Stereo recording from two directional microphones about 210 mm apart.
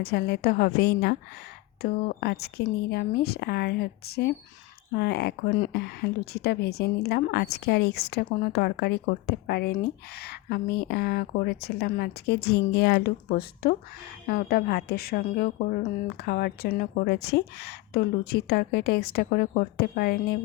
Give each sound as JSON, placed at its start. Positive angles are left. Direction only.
{"t": 0.0, "sound": "a woman's voice", "side_deg": 50}